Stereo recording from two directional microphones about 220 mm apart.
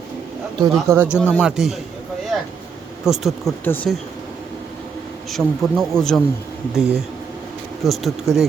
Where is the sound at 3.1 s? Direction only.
Centre (ahead or behind).